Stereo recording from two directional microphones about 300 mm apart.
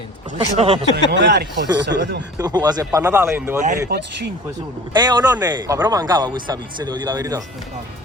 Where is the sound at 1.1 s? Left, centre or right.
Right.